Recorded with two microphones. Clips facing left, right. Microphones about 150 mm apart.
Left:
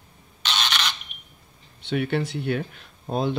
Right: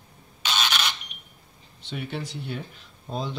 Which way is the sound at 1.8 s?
65° left (ahead or behind).